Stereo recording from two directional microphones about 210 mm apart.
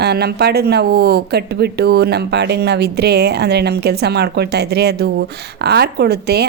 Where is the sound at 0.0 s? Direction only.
50° right (ahead or behind).